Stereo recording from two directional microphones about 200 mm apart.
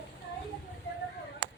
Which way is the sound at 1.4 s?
60° right (ahead or behind).